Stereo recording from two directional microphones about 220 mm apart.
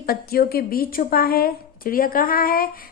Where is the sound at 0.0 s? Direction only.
45° left (ahead or behind).